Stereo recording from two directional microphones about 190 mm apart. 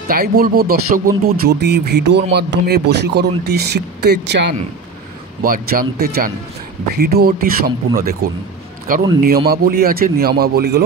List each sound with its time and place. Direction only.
0.1 s speech: 55° right (ahead or behind)
5.4 s speech: 50° right (ahead or behind)